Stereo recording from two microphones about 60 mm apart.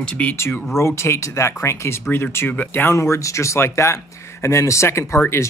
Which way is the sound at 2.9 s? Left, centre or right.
Left.